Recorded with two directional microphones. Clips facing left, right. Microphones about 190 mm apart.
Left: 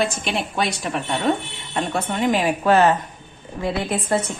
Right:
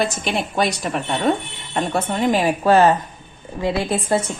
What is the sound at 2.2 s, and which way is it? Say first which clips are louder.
A woman's voice: right 1 dB; 35° right (ahead or behind).